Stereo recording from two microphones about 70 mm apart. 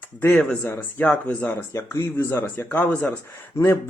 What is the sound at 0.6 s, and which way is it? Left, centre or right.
Speech, left.